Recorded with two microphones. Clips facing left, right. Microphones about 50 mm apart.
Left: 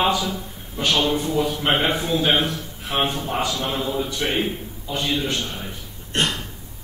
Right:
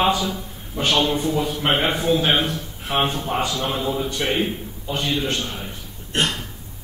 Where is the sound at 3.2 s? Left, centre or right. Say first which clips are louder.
Right 1 dB; centre.